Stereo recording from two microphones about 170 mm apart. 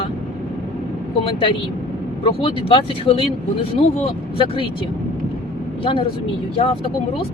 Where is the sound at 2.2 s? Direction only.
30° left (ahead or behind).